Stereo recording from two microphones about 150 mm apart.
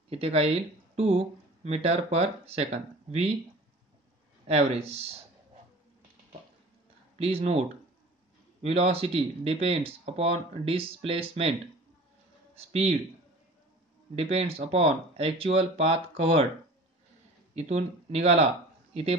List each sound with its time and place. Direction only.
0.1 s speech: 40° right (ahead or behind)
4.5 s speech: 40° right (ahead or behind)
7.2 s speech: 40° right (ahead or behind)
8.6 s speech: 45° right (ahead or behind)
12.5 s speech: 45° right (ahead or behind)
14.1 s speech: 40° right (ahead or behind)
17.6 s speech: 45° right (ahead or behind)